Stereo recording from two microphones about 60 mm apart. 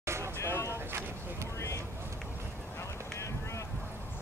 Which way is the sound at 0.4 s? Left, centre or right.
Left.